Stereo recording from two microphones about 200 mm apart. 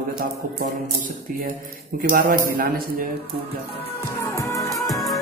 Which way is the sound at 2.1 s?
45° right (ahead or behind).